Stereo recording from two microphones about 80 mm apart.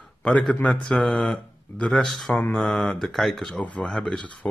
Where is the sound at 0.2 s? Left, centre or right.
Centre.